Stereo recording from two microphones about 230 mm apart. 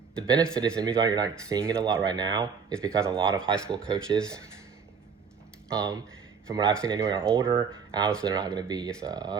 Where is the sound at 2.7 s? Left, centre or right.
Centre.